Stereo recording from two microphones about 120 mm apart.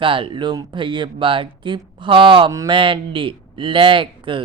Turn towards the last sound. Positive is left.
turn(degrees=-45)  # may be behind; listen again after turning